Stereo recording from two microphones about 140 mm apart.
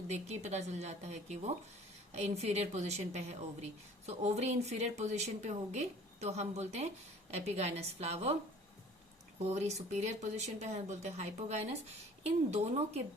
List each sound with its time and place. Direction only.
0.1 s speech: 55° right (ahead or behind)
9.5 s speech: 50° right (ahead or behind)